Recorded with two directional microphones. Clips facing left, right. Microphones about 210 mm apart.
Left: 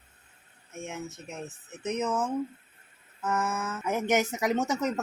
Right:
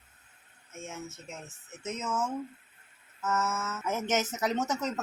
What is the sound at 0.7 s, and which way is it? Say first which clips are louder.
Speech: left 4 dB; 15° left (ahead or behind).